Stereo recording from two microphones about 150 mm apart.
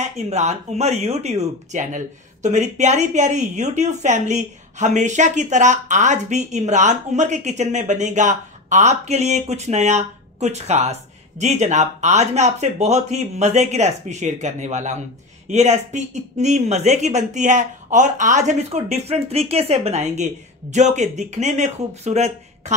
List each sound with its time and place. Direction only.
0.0 s speech: 50° right (ahead or behind)